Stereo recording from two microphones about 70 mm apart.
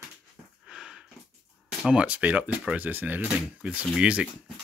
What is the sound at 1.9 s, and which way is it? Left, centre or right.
Speech, centre.